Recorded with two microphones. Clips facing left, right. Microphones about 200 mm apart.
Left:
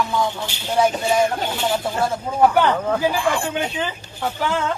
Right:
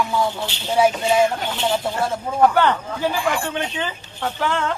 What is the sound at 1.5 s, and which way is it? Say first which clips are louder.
Speech: even; 10° left (ahead or behind).